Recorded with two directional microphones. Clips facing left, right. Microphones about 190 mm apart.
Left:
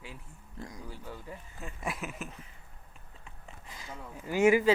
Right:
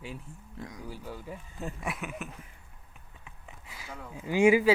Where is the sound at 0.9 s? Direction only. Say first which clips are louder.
Right 3 dB; 10° right (ahead or behind).